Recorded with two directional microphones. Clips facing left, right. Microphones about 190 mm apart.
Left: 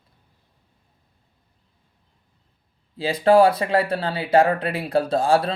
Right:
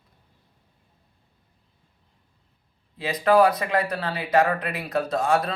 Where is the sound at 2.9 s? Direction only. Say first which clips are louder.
Left 3 dB; 30° left (ahead or behind).